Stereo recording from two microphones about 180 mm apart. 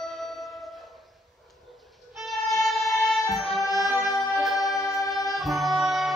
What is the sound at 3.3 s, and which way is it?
Music, centre (ahead or behind).